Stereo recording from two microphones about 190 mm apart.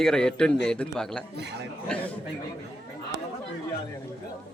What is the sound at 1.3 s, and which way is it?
Speech, 60° right (ahead or behind).